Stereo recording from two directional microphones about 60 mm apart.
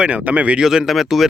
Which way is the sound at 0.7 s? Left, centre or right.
Centre.